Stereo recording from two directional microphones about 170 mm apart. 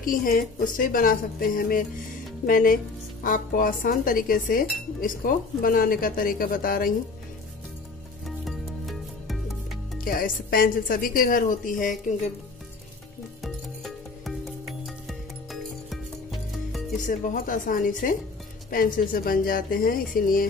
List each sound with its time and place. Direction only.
0.0 s a woman's voice: 55° left (ahead or behind)
8.5 s music: centre (ahead or behind)
9.9 s a woman's voice: 55° left (ahead or behind)
13.4 s music: centre (ahead or behind)
17.0 s a woman's voice: 50° left (ahead or behind)